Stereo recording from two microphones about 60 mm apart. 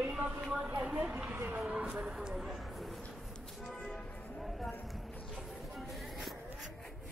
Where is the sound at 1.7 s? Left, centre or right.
Centre.